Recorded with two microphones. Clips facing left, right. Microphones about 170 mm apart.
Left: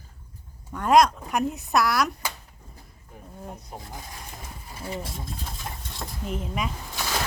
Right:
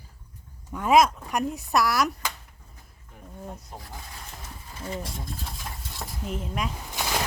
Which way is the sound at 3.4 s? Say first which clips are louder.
Left 1 dB; 20° left (ahead or behind).